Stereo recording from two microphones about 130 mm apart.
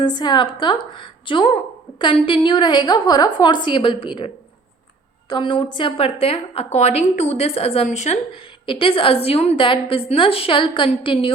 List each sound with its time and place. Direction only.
0.0 s a woman's voice: 35° left (ahead or behind)
5.3 s a woman's voice: 40° left (ahead or behind); by 8.2 s 60° left (ahead or behind)
8.4 s a woman's voice: 40° left (ahead or behind)